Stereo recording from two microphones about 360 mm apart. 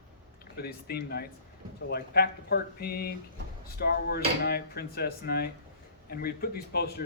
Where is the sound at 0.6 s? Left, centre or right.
Left.